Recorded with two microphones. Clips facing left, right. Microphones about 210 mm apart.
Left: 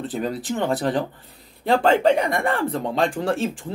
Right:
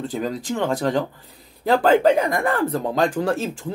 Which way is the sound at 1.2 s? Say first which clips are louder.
Right 2 dB; centre (ahead or behind).